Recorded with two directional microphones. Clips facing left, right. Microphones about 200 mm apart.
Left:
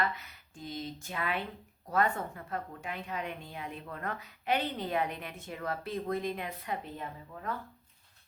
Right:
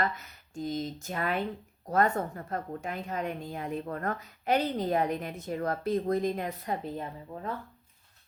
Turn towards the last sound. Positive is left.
turn(degrees=-30)  # may be behind; listen again after turning